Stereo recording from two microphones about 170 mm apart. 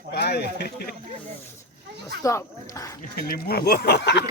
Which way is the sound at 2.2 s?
20° left (ahead or behind).